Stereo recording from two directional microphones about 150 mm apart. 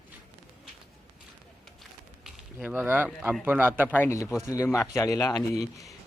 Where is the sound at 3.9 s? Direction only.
15° left (ahead or behind).